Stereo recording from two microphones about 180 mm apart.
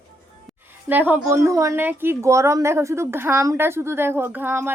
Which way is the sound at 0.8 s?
10° right (ahead or behind).